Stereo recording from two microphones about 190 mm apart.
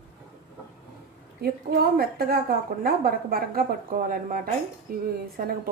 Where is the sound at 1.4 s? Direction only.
55° right (ahead or behind).